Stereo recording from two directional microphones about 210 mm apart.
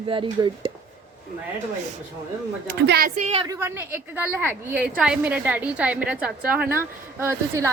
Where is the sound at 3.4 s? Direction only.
15° right (ahead or behind).